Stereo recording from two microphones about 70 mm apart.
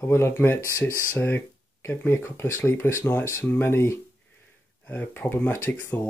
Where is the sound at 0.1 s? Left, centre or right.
Left.